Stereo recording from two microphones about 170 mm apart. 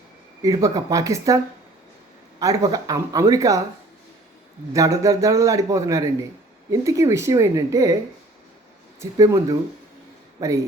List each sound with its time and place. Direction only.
0.4 s a man's voice: 20° right (ahead or behind)
2.4 s a man's voice: 20° right (ahead or behind)
4.7 s a man's voice: 20° right (ahead or behind)
9.0 s a man's voice: 20° right (ahead or behind)